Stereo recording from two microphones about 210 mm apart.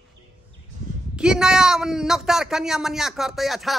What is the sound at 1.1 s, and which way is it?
Speech, 5° right (ahead or behind).